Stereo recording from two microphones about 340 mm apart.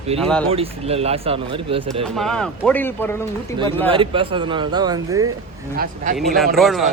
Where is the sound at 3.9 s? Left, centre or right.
Centre.